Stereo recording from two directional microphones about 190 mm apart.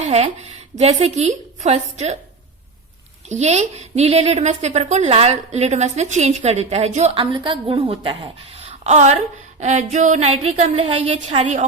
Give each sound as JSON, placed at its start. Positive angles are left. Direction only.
{"t": 0.0, "sound": "a woman's voice", "side_deg": -35}
{"t": 3.2, "sound": "a woman's voice", "side_deg": -35}